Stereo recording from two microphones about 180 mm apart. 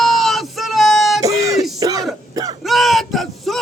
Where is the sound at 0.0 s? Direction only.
Centre (ahead or behind).